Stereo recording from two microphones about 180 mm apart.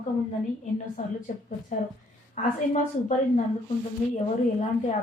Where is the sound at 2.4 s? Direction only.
45° left (ahead or behind).